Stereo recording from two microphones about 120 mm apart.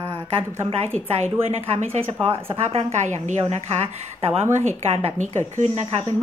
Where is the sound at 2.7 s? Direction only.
55° right (ahead or behind).